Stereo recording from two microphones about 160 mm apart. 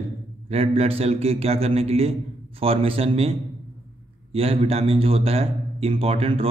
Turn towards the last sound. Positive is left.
turn(degrees=-35)  # may be behind; listen again after turning